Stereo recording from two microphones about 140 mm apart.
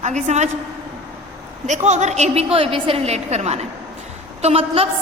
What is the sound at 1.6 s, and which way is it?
A woman's voice, 55° right (ahead or behind).